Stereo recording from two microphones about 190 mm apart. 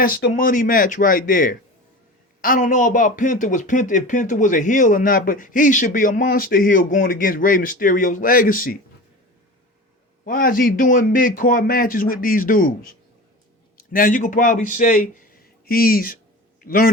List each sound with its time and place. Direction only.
0.0 s speech: 55° left (ahead or behind)
10.2 s speech: 45° left (ahead or behind)
13.7 s a man's voice: 45° left (ahead or behind)